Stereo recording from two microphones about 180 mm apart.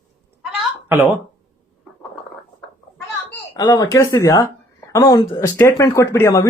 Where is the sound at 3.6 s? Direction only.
20° left (ahead or behind).